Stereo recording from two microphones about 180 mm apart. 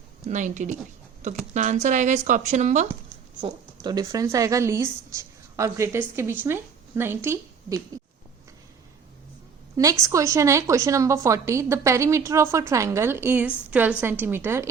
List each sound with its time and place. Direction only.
0.3 s speech: 45° right (ahead or behind)
3.4 s speech: 20° right (ahead or behind)
9.7 s speech: 15° right (ahead or behind)